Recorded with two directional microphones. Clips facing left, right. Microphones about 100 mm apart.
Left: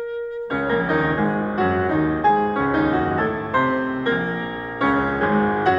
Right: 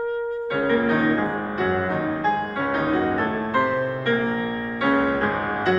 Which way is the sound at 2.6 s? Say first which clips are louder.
Left 3 dB; 15° left (ahead or behind).